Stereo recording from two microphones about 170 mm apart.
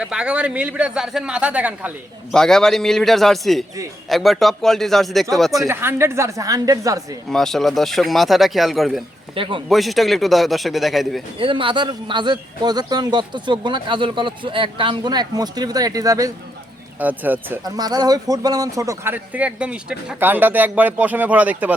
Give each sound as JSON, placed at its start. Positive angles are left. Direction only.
{"t": 0.0, "sound": "a man's voice", "side_deg": -5}
{"t": 2.3, "sound": "speech", "side_deg": 5}
{"t": 5.6, "sound": "a man's voice", "side_deg": -15}
{"t": 7.3, "sound": "speech", "side_deg": 0}
{"t": 9.3, "sound": "speech", "side_deg": -30}
{"t": 9.6, "sound": "speech", "side_deg": 0}
{"t": 11.3, "sound": "a man's voice", "side_deg": -30}
{"t": 17.0, "sound": "a man's voice", "side_deg": -10}
{"t": 17.6, "sound": "a man's voice", "side_deg": -20}